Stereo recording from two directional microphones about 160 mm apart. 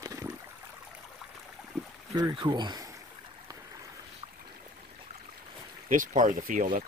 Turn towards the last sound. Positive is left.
turn(degrees=-55)  # may be behind; listen again after turning